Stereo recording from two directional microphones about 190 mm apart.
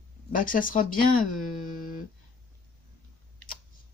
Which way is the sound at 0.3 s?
45° left (ahead or behind).